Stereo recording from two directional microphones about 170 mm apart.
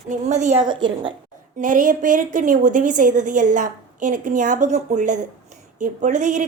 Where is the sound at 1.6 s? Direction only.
50° right (ahead or behind).